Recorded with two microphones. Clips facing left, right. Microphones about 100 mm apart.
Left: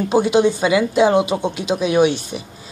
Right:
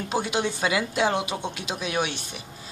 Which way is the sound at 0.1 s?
10° left (ahead or behind).